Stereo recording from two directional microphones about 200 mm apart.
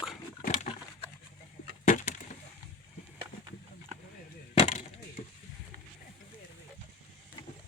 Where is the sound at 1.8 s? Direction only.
35° left (ahead or behind).